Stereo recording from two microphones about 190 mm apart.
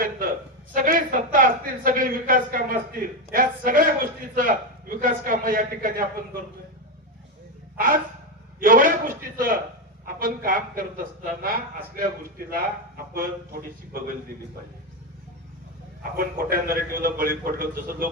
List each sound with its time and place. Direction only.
0.0 s a man's voice: 45° right (ahead or behind)
7.8 s a man's voice: 50° right (ahead or behind)
16.1 s a man's voice: 50° right (ahead or behind)